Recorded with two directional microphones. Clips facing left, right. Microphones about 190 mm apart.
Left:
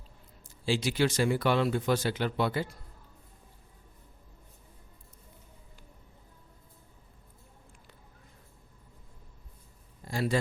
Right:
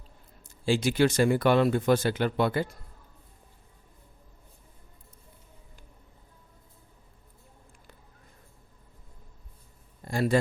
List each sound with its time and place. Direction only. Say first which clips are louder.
0.4 s speech: right 4 dB; 50° right (ahead or behind)
10.1 s speech: right 5 dB; 50° right (ahead or behind)